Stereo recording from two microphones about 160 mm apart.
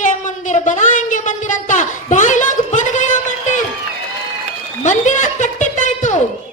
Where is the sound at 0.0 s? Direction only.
50° left (ahead or behind).